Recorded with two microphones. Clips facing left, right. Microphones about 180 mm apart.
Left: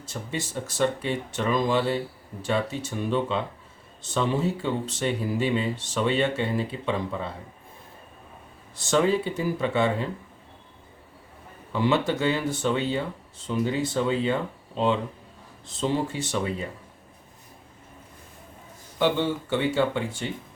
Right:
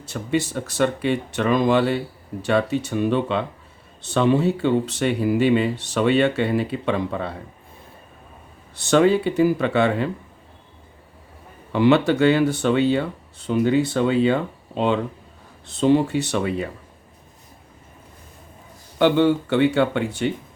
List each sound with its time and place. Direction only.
0.0 s speech: 70° right (ahead or behind)
8.7 s speech: 70° right (ahead or behind)
11.7 s speech: 65° right (ahead or behind)
18.9 s speech: 65° right (ahead or behind)